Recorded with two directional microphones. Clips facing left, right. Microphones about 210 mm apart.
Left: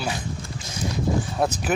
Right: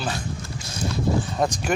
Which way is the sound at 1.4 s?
5° left (ahead or behind).